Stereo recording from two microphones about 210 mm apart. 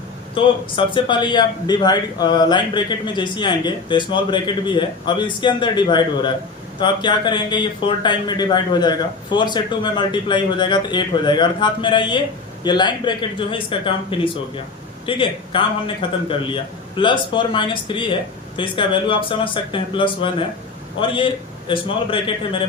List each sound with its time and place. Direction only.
0.3 s a man's voice: 25° left (ahead or behind)